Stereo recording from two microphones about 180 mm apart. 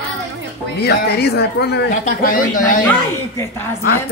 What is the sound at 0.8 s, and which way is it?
Speech, 65° left (ahead or behind).